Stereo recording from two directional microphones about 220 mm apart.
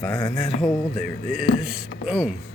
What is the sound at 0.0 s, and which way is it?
Speech, 15° left (ahead or behind).